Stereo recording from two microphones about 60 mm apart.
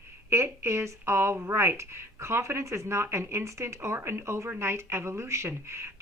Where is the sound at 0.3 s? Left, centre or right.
Right.